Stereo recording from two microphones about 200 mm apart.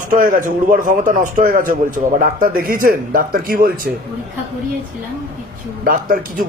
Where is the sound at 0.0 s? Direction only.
40° right (ahead or behind).